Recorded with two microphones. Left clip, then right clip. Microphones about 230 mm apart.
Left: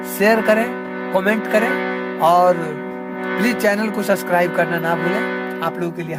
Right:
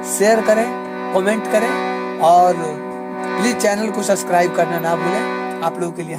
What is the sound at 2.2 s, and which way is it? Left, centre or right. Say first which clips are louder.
Speech: right 2 dB; left.